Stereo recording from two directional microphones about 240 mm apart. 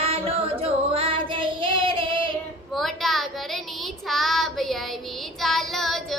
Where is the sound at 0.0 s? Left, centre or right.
Right.